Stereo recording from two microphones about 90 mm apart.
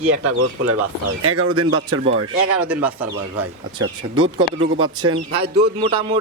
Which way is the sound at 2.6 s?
20° right (ahead or behind).